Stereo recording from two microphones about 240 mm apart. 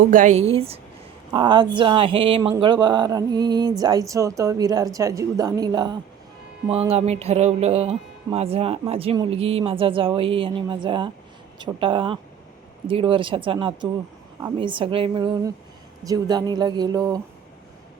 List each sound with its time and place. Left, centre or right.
0.0 s music: right
2.6 s speech: centre
6.7 s music: right
16.0 s speech: centre